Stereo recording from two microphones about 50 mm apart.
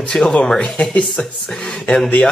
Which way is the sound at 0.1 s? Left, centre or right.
Centre.